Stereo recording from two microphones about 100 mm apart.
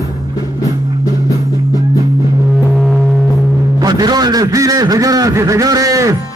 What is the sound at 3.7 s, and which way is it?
A man's voice, 40° right (ahead or behind).